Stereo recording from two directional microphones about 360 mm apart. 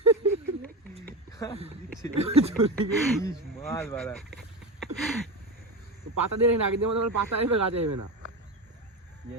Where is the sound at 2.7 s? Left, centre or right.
Centre.